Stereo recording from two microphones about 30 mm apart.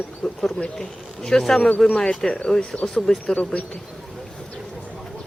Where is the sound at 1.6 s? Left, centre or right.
Left.